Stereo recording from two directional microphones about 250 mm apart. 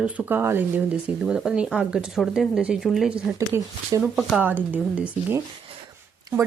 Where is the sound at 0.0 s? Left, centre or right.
Centre.